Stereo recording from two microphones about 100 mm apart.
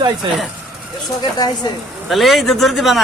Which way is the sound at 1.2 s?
45° left (ahead or behind).